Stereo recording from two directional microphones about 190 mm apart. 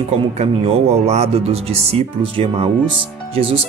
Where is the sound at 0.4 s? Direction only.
35° right (ahead or behind).